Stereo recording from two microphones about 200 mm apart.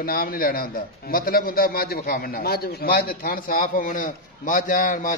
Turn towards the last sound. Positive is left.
turn(degrees=40)  # may be behind; listen again after turning